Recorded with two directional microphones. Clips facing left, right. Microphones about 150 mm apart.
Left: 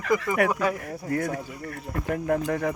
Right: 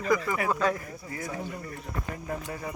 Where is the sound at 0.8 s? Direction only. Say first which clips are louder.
Left 10 dB; 60° left (ahead or behind).